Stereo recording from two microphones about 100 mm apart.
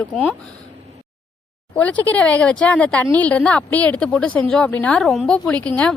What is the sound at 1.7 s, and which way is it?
A woman's voice, 15° left (ahead or behind).